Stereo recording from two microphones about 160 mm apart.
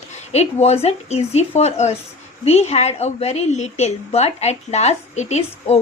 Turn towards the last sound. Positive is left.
turn(degrees=40)  # may be behind; listen again after turning